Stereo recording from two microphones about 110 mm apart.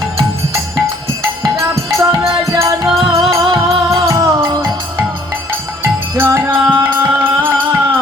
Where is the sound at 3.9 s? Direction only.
25° right (ahead or behind).